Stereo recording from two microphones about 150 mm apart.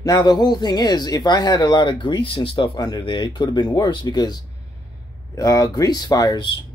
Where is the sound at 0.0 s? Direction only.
30° left (ahead or behind).